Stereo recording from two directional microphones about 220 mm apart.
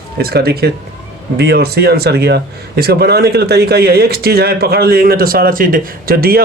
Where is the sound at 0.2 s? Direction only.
45° right (ahead or behind).